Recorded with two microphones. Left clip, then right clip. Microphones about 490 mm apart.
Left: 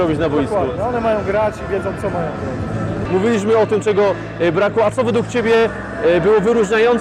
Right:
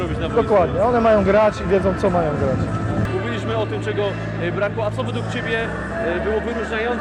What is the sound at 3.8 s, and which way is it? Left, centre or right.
Speech, left.